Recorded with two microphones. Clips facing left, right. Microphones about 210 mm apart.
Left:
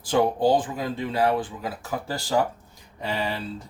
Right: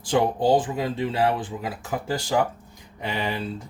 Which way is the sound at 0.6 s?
25° right (ahead or behind).